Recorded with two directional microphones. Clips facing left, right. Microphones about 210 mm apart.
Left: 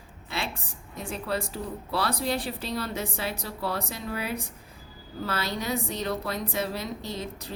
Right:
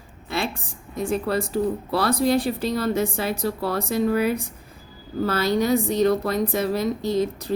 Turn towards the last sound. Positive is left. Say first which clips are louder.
# right 12 dB
turn(degrees=-45)  # may be behind; listen again after turning